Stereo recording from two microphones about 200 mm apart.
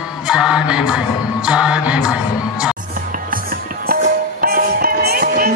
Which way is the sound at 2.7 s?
45° right (ahead or behind).